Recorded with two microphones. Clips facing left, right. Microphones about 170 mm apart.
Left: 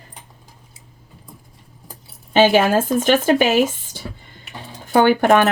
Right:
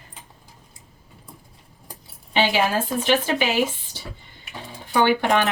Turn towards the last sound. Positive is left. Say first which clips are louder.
# left 6 dB
turn(degrees=45)  # may be behind; listen again after turning